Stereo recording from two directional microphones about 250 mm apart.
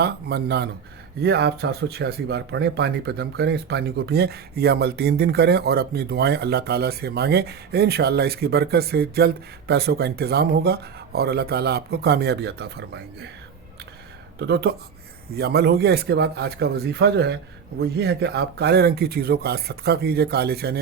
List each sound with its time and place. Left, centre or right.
0.0 s speech: right
14.3 s speech: right